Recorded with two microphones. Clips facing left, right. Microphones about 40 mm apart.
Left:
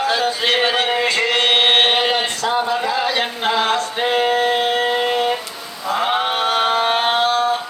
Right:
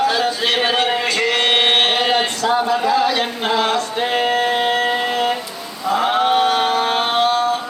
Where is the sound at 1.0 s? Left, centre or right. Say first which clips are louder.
Left 1 dB; left.